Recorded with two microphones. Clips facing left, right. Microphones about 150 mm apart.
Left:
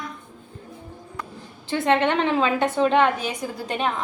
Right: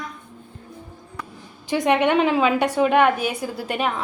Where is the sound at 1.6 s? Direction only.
15° right (ahead or behind).